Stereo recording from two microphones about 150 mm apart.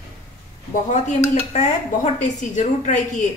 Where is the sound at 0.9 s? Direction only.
50° left (ahead or behind).